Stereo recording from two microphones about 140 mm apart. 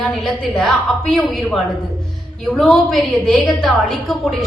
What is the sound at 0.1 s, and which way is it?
A woman's voice, centre (ahead or behind).